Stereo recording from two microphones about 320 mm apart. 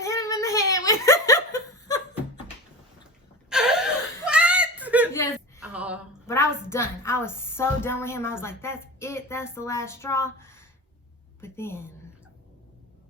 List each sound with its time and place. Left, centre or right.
0.0 s giggle: centre
3.5 s whimper: centre
5.6 s a sound: centre
6.2 s a woman's voice: centre